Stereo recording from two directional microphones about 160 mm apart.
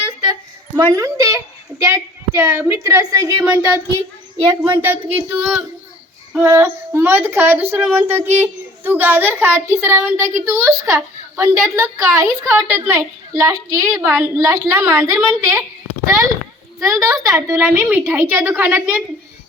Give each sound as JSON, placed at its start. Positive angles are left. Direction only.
{"t": 0.8, "sound": "a woman's voice", "side_deg": -20}
{"t": 16.8, "sound": "a woman's voice", "side_deg": -20}